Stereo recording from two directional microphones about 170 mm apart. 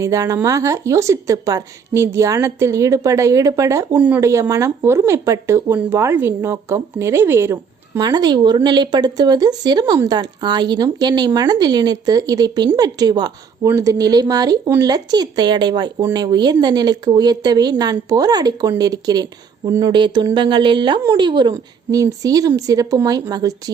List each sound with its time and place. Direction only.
0.0 s speech: 20° right (ahead or behind)